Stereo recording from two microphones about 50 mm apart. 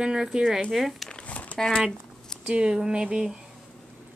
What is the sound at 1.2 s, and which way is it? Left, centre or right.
Crumpling, left.